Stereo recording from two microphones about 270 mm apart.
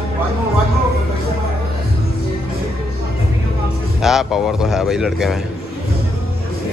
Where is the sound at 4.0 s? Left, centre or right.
Centre.